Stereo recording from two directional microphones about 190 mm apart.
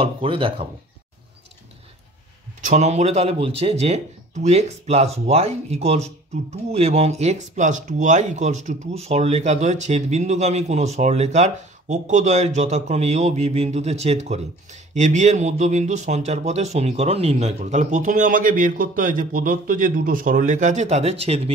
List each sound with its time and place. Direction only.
0.0 s speech: 30° right (ahead or behind)
2.6 s speech: 40° right (ahead or behind)